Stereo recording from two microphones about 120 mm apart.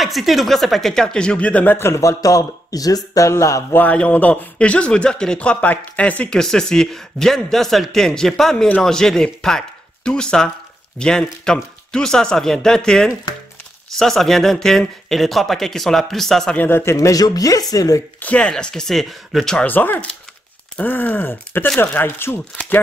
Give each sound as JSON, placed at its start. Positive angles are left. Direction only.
{"t": 0.0, "sound": "speech", "side_deg": 0}
{"t": 3.8, "sound": "speech", "side_deg": 10}
{"t": 16.5, "sound": "speech", "side_deg": 20}
{"t": 18.2, "sound": "speech", "side_deg": 10}